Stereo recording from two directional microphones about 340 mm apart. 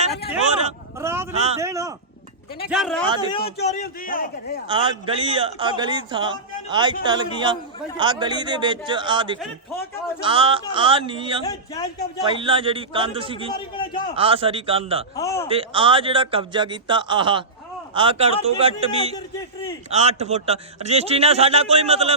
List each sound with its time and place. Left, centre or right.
1.0 s a man's voice: centre
1.3 s a man's voice: centre
3.4 s a man's voice: centre
4.7 s a man's voice: centre
11.4 s a man's voice: centre
12.2 s a man's voice: centre
13.5 s a man's voice: centre
14.2 s a man's voice: centre
15.1 s a man's voice: centre
15.4 s a man's voice: centre
19.9 s a man's voice: centre